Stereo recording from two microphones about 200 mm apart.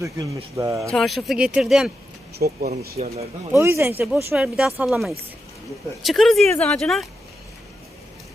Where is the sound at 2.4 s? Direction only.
50° right (ahead or behind).